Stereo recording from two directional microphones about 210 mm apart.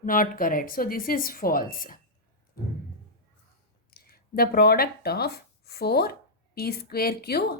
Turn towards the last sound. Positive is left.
turn(degrees=50)  # may be behind; listen again after turning